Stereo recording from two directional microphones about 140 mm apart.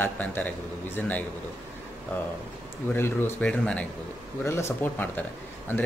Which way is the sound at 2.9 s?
15° left (ahead or behind).